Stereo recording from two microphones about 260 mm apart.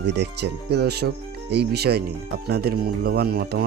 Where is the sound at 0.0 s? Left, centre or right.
Right.